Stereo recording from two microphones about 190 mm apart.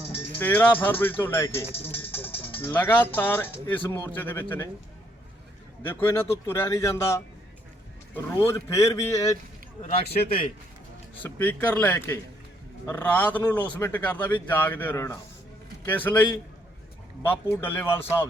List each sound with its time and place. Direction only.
0.3 s a man's voice: 10° left (ahead or behind)
5.8 s a man's voice: 10° left (ahead or behind)
9.8 s a man's voice: 30° left (ahead or behind)
11.2 s a man's voice: 10° left (ahead or behind)